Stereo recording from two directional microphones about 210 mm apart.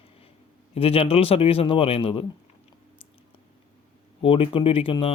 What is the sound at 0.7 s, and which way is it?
A man's voice, 25° left (ahead or behind).